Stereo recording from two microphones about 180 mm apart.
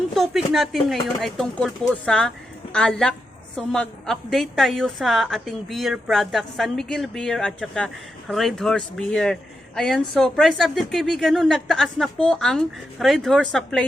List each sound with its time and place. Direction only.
0.1 s speech: centre (ahead or behind)